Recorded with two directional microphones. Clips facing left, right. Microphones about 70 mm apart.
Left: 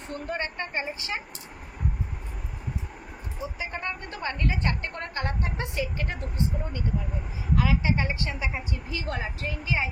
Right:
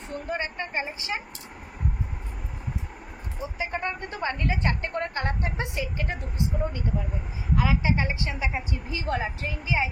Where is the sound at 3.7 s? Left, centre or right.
Right.